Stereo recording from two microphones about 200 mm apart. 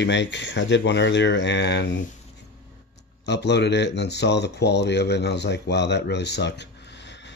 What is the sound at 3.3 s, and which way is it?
Speech, 60° left (ahead or behind).